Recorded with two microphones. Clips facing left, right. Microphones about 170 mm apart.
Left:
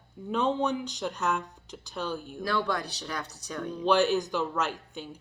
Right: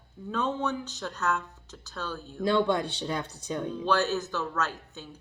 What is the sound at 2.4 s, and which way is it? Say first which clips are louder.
Speech: right 6 dB; 25° right (ahead or behind).